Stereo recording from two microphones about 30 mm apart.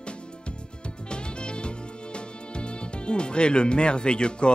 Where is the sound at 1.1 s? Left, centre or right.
Left.